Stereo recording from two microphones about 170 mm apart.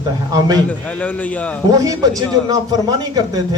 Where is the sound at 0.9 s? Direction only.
10° left (ahead or behind).